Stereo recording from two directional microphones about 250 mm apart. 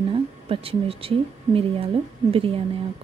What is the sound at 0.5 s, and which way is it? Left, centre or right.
Speech, right.